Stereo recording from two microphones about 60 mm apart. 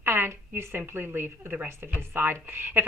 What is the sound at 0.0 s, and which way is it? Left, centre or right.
A woman's voice, right.